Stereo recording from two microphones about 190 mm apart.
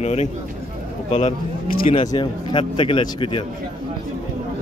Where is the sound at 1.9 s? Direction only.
25° left (ahead or behind).